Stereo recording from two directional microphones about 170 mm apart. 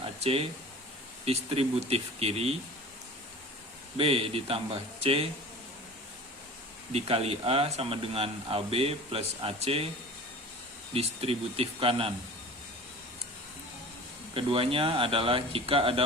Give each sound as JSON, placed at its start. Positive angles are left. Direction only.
{"t": 0.0, "sound": "a sound", "side_deg": -35}
{"t": 1.2, "sound": "speech", "side_deg": -35}
{"t": 3.9, "sound": "speech", "side_deg": -35}
{"t": 6.9, "sound": "speech", "side_deg": -35}
{"t": 10.9, "sound": "speech", "side_deg": -35}
{"t": 14.3, "sound": "speech", "side_deg": -35}